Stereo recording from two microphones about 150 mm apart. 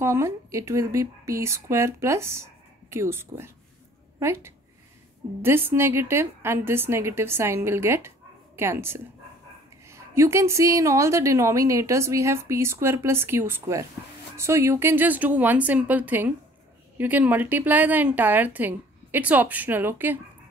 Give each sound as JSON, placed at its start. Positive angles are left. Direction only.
{"t": 0.0, "sound": "a woman's voice", "side_deg": -20}